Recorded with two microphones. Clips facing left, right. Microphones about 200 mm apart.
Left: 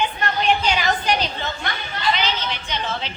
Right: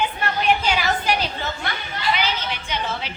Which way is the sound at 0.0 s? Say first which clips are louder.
Left 1 dB; 5° right (ahead or behind).